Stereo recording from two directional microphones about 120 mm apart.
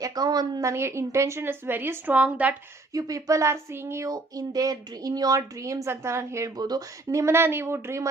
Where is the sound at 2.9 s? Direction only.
30° right (ahead or behind).